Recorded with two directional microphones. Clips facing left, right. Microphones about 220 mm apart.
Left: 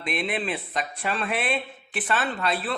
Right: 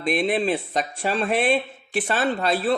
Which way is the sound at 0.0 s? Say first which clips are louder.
Right 7 dB; 40° right (ahead or behind).